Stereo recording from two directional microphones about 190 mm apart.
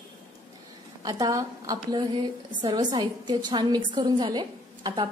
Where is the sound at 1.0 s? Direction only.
20° right (ahead or behind).